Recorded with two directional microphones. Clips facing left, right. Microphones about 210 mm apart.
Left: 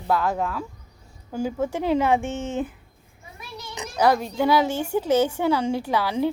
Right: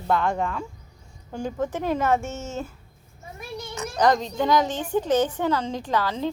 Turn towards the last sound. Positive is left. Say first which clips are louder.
# left 2 dB
turn(degrees=10)  # may be behind; listen again after turning